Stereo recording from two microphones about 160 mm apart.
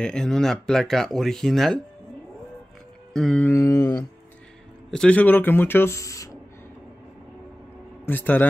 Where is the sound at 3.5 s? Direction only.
20° left (ahead or behind).